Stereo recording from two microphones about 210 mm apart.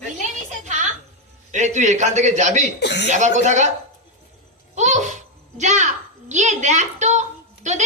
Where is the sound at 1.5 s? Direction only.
35° right (ahead or behind).